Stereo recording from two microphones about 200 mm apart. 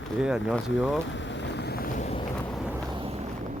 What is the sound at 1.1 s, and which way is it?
Vehicle, 65° left (ahead or behind).